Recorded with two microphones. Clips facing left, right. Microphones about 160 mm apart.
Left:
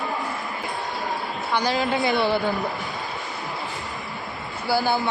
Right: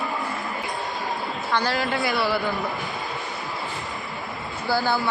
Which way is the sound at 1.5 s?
15° left (ahead or behind).